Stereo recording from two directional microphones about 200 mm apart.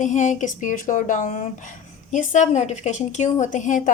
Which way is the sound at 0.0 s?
35° left (ahead or behind).